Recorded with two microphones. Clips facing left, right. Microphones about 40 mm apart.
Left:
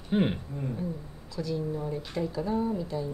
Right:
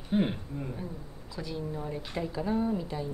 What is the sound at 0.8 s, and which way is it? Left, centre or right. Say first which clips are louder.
Speech: left 5 dB; centre.